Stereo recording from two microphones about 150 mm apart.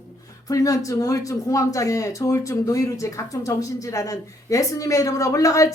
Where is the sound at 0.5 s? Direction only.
20° left (ahead or behind).